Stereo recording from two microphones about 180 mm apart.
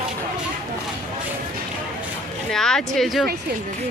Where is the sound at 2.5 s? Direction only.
5° left (ahead or behind).